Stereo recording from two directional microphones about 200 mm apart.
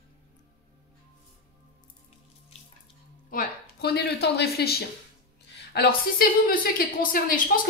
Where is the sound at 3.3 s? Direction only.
50° left (ahead or behind).